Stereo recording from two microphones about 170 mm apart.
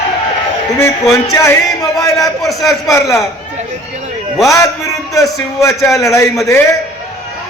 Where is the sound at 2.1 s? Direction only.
Centre (ahead or behind).